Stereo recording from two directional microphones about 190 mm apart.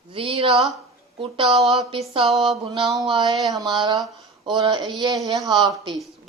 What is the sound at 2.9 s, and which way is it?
Speech, 20° right (ahead or behind).